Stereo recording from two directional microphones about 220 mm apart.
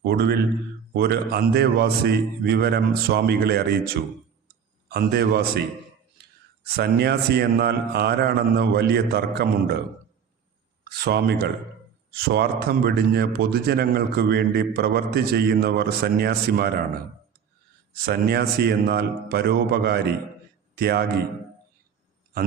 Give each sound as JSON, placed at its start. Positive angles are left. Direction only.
{"t": 0.0, "sound": "a man's voice", "side_deg": -45}
{"t": 6.7, "sound": "a man's voice", "side_deg": -45}
{"t": 10.8, "sound": "a man's voice", "side_deg": -45}
{"t": 17.9, "sound": "a man's voice", "side_deg": -45}